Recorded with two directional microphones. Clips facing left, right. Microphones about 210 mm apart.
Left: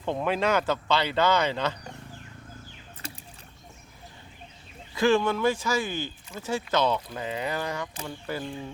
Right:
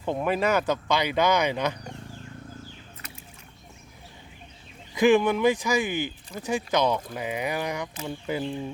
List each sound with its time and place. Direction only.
0.0 s speech: 10° right (ahead or behind)
3.0 s a sound: 30° left (ahead or behind)
4.9 s speech: 15° right (ahead or behind)